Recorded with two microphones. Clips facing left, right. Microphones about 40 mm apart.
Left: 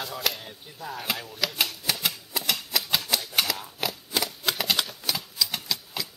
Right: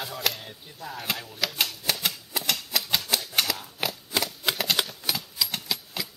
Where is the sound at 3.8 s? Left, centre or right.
Centre.